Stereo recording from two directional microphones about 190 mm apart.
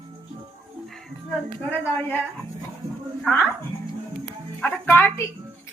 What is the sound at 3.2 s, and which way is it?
Speech, 5° left (ahead or behind).